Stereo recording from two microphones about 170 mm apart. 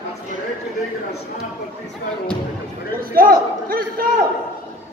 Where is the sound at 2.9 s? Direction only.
60° right (ahead or behind).